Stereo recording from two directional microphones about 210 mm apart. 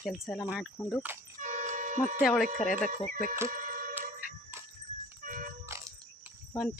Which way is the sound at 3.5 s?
40° right (ahead or behind).